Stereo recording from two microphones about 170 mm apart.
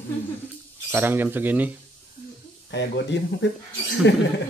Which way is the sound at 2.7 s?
90° left.